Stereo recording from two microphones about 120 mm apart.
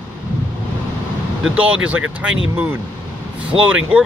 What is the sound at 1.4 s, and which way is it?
Speech, 10° right (ahead or behind).